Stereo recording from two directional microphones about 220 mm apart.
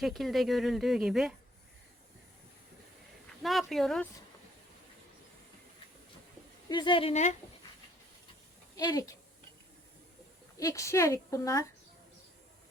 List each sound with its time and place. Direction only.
0.0 s speech: centre (ahead or behind)
3.4 s speech: centre (ahead or behind)
6.7 s speech: 20° left (ahead or behind)
8.7 s speech: 15° left (ahead or behind)
10.6 s a woman's voice: 15° left (ahead or behind)